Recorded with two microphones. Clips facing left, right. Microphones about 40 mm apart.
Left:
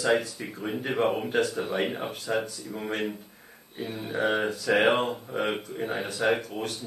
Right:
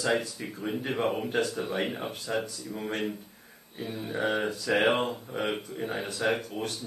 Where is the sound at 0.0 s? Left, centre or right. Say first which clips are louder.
Left 3 dB; centre.